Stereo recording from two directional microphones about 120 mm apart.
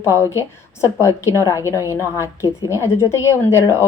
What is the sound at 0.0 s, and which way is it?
A woman's voice, 25° left (ahead or behind).